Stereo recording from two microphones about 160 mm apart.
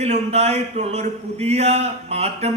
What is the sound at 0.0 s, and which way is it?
Speech, 40° right (ahead or behind).